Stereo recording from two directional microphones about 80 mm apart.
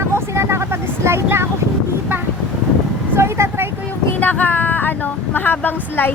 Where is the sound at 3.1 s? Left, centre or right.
Right.